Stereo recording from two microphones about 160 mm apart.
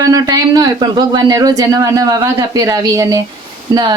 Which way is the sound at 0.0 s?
25° right (ahead or behind).